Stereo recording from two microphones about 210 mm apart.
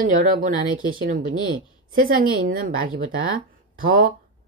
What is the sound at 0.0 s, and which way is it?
Speech, 40° right (ahead or behind).